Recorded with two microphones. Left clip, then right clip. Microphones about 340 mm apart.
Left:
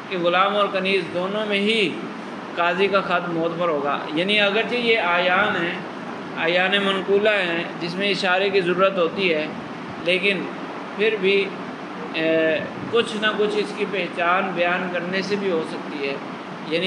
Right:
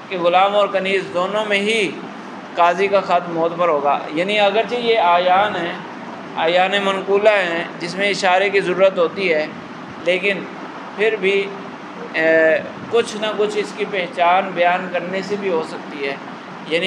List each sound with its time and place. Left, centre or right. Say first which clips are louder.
0.1 s a man's voice: right 5 dB; centre
16.7 s a man's voice: right 4 dB; centre